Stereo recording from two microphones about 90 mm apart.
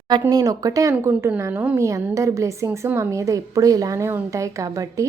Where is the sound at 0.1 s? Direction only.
45° right (ahead or behind).